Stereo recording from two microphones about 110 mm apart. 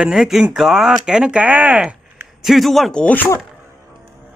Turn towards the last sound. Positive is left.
turn(degrees=15)  # may be behind; listen again after turning